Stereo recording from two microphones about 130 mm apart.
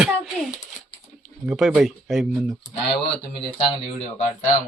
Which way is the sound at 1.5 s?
5° right (ahead or behind).